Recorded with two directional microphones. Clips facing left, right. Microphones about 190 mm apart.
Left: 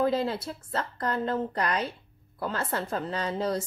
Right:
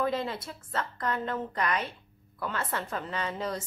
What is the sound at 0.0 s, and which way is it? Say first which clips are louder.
A woman's voice: left 4 dB; 30° left (ahead or behind).